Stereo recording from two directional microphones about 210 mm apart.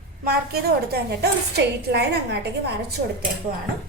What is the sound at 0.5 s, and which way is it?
A woman's voice, 50° right (ahead or behind).